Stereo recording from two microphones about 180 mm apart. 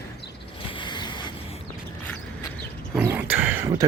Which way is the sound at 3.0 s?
10° right (ahead or behind).